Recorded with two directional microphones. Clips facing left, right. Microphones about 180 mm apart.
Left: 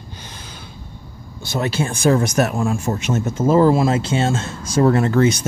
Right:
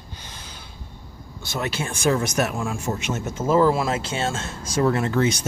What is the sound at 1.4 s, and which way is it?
Speech, 35° left (ahead or behind).